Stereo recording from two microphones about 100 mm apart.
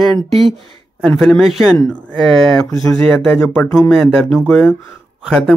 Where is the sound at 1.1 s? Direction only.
Centre (ahead or behind).